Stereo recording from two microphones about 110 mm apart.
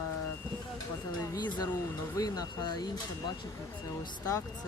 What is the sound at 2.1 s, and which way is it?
Speech, 35° left (ahead or behind).